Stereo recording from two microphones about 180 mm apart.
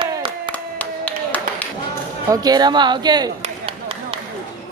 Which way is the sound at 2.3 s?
20° right (ahead or behind).